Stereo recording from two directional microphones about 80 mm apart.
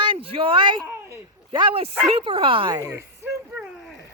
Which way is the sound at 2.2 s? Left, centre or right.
Right.